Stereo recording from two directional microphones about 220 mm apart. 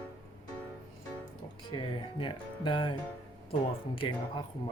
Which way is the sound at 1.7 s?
25° left (ahead or behind).